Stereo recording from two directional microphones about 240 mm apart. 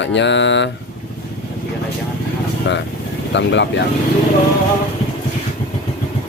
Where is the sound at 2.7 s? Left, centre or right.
Left.